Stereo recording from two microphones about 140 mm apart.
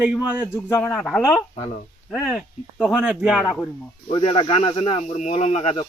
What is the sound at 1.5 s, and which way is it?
Speech, 40° left (ahead or behind).